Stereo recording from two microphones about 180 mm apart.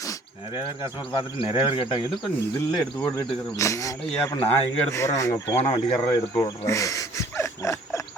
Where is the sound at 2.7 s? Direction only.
5° left (ahead or behind).